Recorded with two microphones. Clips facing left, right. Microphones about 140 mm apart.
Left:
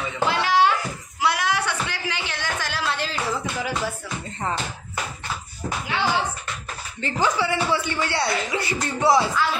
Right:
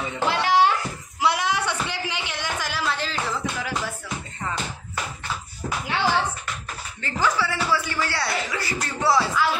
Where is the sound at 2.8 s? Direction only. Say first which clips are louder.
Left 1 dB; centre (ahead or behind).